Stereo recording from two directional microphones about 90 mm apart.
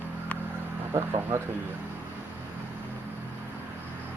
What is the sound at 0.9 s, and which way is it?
Speech, 30° right (ahead or behind).